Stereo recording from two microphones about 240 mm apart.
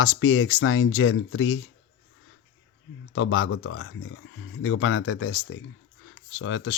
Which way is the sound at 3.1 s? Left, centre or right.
Left.